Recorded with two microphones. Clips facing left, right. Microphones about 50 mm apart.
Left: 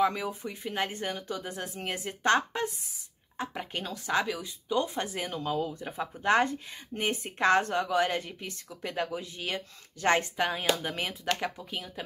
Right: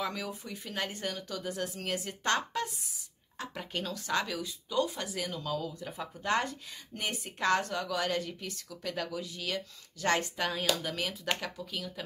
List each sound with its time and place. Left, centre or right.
0.0 s a woman's voice: left